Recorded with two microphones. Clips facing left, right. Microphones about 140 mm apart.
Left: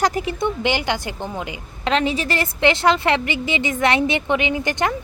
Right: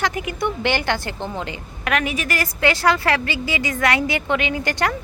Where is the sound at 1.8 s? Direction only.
25° left (ahead or behind).